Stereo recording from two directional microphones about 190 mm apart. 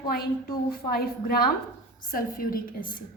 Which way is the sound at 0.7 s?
50° left (ahead or behind).